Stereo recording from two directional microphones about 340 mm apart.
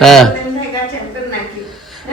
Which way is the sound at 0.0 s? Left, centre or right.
Centre.